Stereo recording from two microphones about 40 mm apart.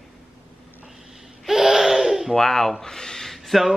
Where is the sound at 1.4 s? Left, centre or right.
Centre.